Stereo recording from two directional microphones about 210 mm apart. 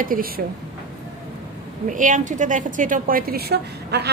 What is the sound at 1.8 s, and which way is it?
A woman's voice, 35° right (ahead or behind).